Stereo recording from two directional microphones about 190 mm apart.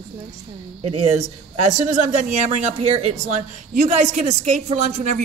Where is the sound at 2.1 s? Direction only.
40° right (ahead or behind).